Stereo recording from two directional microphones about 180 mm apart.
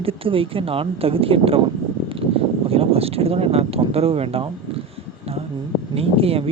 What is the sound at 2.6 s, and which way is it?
Speech, 30° right (ahead or behind).